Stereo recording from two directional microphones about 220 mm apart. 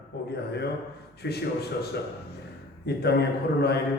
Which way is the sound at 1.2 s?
50° left (ahead or behind).